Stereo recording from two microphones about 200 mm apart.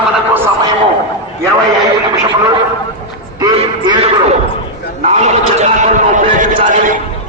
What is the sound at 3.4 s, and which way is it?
Quack, 20° right (ahead or behind).